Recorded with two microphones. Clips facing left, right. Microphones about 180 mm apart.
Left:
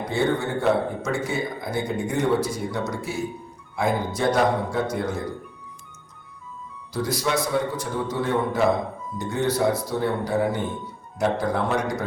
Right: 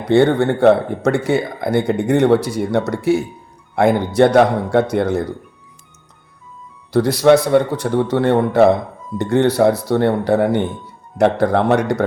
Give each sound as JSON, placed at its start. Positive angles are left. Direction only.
{"t": 0.0, "sound": "speech", "side_deg": -70}
{"t": 6.9, "sound": "speech", "side_deg": -70}